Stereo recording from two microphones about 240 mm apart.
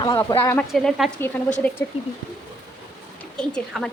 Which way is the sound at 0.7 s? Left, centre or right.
Centre.